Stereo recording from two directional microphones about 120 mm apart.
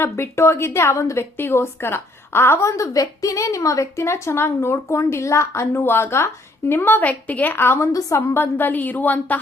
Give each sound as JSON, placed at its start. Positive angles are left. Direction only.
{"t": 0.0, "sound": "a woman's voice", "side_deg": 20}